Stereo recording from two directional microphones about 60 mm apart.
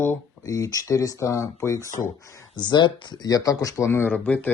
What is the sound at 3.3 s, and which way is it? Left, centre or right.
Speech, left.